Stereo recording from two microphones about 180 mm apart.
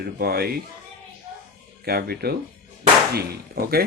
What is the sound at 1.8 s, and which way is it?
Speech, 60° right (ahead or behind).